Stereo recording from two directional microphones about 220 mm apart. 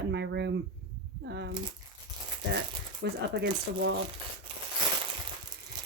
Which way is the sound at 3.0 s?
50° right (ahead or behind).